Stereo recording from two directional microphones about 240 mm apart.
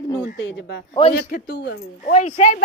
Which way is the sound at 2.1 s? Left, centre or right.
Left.